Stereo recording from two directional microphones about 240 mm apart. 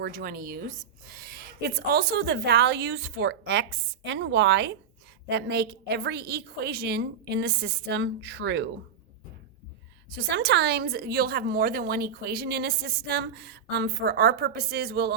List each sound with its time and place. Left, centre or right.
0.0 s speech: right
10.1 s a woman's voice: right